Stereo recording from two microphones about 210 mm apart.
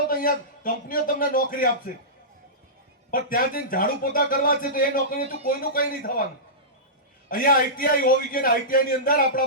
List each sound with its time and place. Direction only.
0.1 s a man's voice: 40° left (ahead or behind)
3.1 s a man's voice: 45° left (ahead or behind)
7.3 s a man's voice: 40° left (ahead or behind)